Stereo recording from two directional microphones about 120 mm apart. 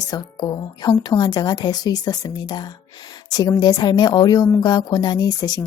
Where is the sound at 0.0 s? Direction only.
35° left (ahead or behind).